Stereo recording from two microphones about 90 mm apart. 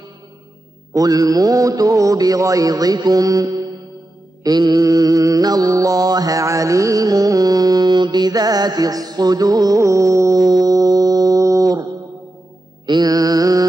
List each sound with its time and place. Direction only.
0.9 s mantra: 40° right (ahead or behind)
12.8 s mantra: 50° right (ahead or behind)